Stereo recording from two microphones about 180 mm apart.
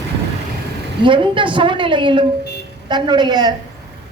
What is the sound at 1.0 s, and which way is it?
A woman's voice, 25° right (ahead or behind).